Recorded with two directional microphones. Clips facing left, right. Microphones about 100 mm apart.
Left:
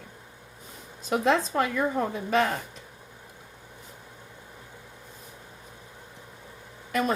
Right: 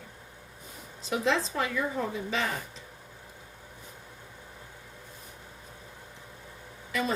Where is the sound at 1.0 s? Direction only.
50° left (ahead or behind).